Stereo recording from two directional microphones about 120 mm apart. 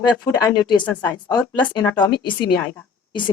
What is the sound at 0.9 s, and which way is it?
Speech, 15° left (ahead or behind).